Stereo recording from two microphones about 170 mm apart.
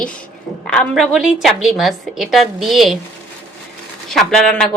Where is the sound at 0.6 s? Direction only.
5° left (ahead or behind).